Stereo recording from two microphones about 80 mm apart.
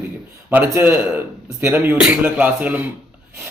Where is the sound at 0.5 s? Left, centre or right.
Right.